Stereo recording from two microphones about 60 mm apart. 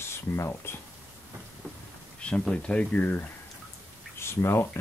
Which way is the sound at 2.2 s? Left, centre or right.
Centre.